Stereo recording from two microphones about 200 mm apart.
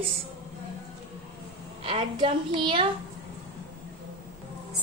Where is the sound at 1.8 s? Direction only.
30° right (ahead or behind).